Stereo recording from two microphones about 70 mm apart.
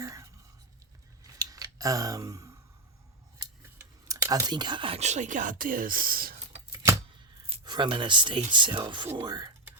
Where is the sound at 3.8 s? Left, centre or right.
Right.